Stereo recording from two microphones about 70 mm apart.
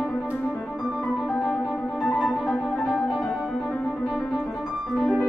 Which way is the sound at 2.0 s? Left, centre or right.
Centre.